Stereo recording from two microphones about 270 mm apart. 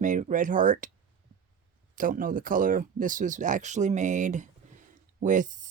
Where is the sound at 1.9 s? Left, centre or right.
Right.